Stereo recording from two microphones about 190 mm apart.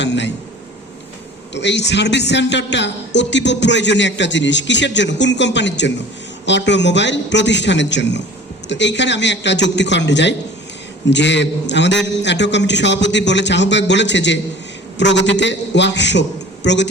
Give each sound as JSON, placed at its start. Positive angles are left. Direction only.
{"t": 0.0, "sound": "a man's voice", "side_deg": 65}
{"t": 1.5, "sound": "a man's voice", "side_deg": 65}